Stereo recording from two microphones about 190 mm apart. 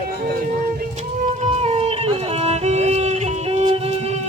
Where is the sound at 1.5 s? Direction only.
35° right (ahead or behind).